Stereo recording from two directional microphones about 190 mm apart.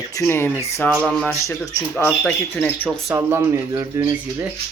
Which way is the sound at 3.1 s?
10° right (ahead or behind).